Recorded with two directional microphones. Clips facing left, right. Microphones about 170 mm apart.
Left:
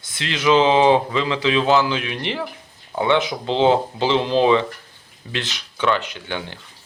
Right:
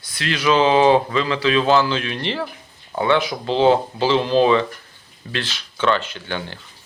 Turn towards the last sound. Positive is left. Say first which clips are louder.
# right 1 dB
turn(degrees=15)  # may be behind; listen again after turning